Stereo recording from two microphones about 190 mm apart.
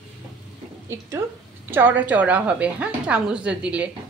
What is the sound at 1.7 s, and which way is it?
A woman's voice, 10° right (ahead or behind).